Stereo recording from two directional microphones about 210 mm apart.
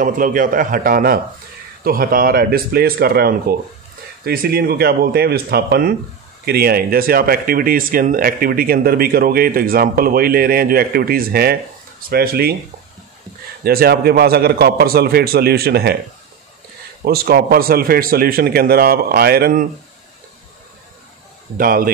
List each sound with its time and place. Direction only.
0.0 s a man's voice: 40° right (ahead or behind)
13.7 s speech: 45° right (ahead or behind)
17.0 s speech: 45° right (ahead or behind)
21.5 s speech: 45° right (ahead or behind)